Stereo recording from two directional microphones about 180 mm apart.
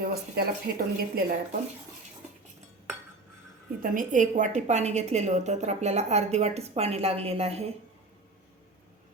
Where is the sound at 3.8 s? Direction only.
45° right (ahead or behind).